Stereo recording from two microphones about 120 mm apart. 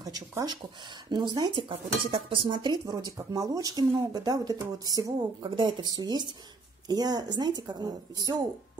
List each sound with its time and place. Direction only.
0.0 s dishes: 30° right (ahead or behind)
5.4 s dishes: 45° right (ahead or behind)